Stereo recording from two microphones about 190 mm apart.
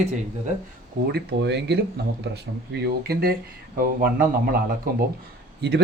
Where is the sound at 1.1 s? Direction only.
60° right (ahead or behind).